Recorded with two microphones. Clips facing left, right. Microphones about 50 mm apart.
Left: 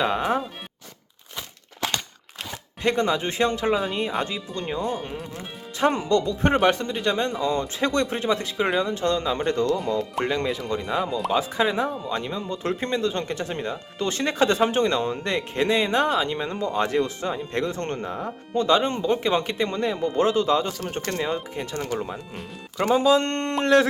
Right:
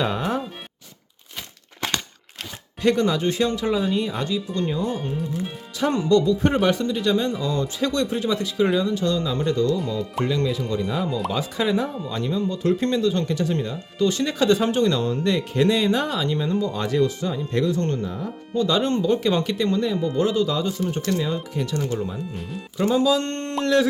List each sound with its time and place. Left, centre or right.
0.0 s music: centre
2.8 s speech: left
5.4 s speech: left
7.8 s speech: left
10.8 s speech: centre
11.9 s speech: centre
13.0 s speech: left
18.8 s speech: centre
22.4 s speech: centre
22.8 s speech: left